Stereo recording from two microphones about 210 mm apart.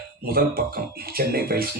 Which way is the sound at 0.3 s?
45° right (ahead or behind).